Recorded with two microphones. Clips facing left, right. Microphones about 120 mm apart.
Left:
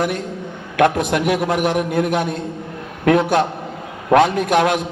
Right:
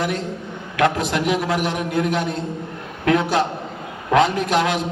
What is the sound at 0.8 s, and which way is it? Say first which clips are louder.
A man's voice: left 3 dB; 50° left (ahead or behind).